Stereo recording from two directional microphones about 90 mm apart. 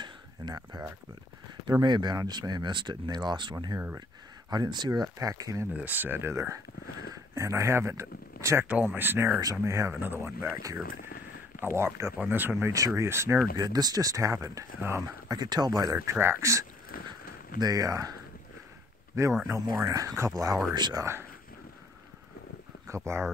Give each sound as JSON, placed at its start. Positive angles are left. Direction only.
{"t": 0.0, "sound": "a sound", "side_deg": -50}
{"t": 1.7, "sound": "speech", "side_deg": -55}
{"t": 3.5, "sound": "speech", "side_deg": -45}
{"t": 4.5, "sound": "speech", "side_deg": -55}
{"t": 5.2, "sound": "speech", "side_deg": -40}
{"t": 5.7, "sound": "speech", "side_deg": -20}
{"t": 13.6, "sound": "speech", "side_deg": -45}
{"t": 15.2, "sound": "speech", "side_deg": -50}
{"t": 16.2, "sound": "speech", "side_deg": -30}
{"t": 17.6, "sound": "speech", "side_deg": -45}
{"t": 19.4, "sound": "speech", "side_deg": -40}
{"t": 20.7, "sound": "speech", "side_deg": -55}
{"t": 22.8, "sound": "speech", "side_deg": -30}